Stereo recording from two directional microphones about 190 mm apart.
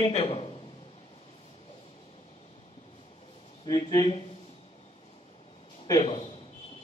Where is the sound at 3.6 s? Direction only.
20° left (ahead or behind).